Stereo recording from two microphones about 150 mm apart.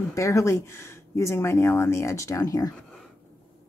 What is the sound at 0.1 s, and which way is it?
A woman's voice, 20° left (ahead or behind).